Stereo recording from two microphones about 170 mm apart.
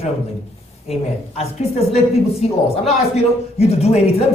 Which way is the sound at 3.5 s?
40° left (ahead or behind).